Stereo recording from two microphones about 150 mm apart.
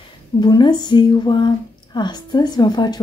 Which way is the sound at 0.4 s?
30° left (ahead or behind).